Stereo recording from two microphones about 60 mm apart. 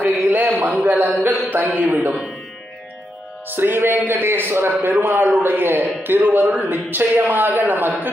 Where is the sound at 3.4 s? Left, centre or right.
Right.